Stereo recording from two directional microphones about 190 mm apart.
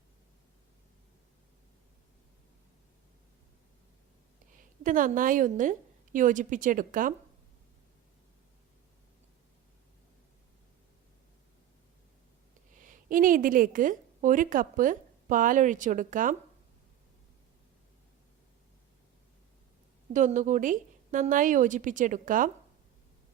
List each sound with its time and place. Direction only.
4.8 s a woman's voice: 45° right (ahead or behind)
12.8 s a woman's voice: 45° right (ahead or behind)
20.1 s a woman's voice: 40° right (ahead or behind)